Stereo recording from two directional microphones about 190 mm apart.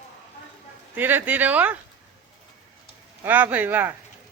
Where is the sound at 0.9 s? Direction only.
10° right (ahead or behind).